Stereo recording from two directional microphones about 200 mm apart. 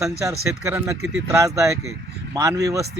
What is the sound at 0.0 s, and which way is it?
Speech, 15° right (ahead or behind).